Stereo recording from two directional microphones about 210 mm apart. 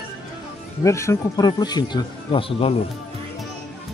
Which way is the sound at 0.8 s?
15° left (ahead or behind).